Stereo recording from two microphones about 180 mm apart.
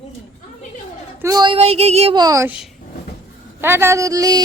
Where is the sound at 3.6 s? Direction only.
15° right (ahead or behind).